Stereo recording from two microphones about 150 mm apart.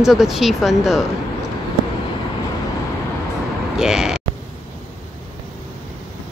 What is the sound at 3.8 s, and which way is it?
Speech, 5° right (ahead or behind).